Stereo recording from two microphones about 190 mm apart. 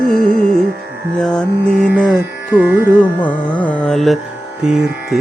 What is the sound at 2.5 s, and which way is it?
Music, 10° right (ahead or behind).